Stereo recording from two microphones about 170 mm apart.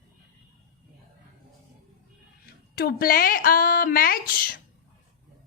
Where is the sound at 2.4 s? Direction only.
60° left (ahead or behind).